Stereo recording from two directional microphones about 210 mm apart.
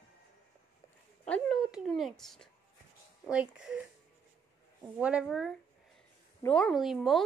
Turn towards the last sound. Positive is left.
turn(degrees=0)  # may be behind; listen again after turning